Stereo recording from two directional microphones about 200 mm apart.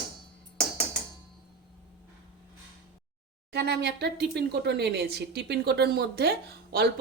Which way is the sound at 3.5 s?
55° right (ahead or behind).